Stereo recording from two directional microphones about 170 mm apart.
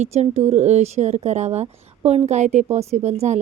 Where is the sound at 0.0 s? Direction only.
40° right (ahead or behind).